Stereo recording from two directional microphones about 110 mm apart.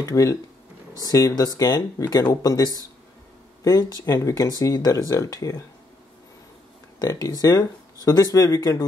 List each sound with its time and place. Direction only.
0.0 s speech: 30° left (ahead or behind)
7.0 s speech: 35° left (ahead or behind)